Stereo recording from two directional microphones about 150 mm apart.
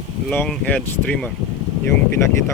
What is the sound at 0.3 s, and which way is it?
Speech, 5° left (ahead or behind).